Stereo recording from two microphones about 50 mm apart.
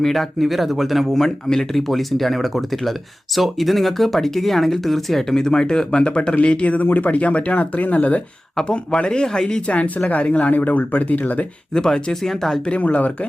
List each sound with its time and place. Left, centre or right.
0.0 s speech: centre; by 11.4 s left
11.7 s speech: centre
12.8 s speech: left